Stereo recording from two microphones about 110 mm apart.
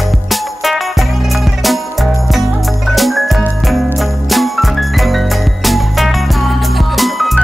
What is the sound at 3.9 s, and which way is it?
Music, centre (ahead or behind).